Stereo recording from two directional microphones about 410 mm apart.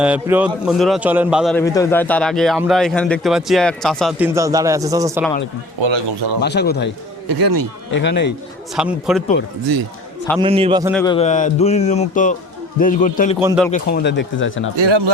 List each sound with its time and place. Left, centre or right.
0.0 s a man's voice: centre
5.8 s speech: right
6.4 s speech: left
7.3 s a man's voice: right
7.9 s speech: left
8.7 s a man's voice: centre
10.4 s a man's voice: centre
10.9 s a sound: centre
12.8 s speech: centre
13.4 s a man's voice: centre
13.7 s speech: centre
14.8 s speech: right